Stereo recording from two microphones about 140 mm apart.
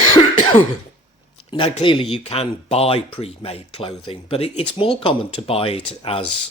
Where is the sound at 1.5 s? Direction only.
35° left (ahead or behind).